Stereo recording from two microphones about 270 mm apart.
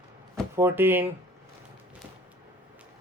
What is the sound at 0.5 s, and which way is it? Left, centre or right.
Speech, centre.